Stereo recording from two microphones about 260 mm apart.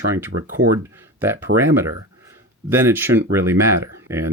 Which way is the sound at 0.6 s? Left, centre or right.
Right.